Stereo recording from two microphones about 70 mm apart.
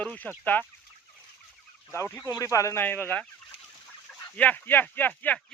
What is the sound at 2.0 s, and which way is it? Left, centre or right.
Speech, left.